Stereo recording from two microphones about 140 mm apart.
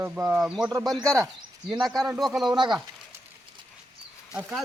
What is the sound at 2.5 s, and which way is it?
Speech, 30° right (ahead or behind).